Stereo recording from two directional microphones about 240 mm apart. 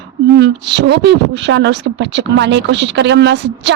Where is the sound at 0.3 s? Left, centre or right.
Right.